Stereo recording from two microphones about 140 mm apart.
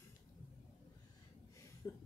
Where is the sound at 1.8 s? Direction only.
20° left (ahead or behind).